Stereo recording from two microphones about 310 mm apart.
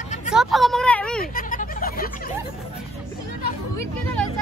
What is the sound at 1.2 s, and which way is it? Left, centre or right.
Vehicle, left.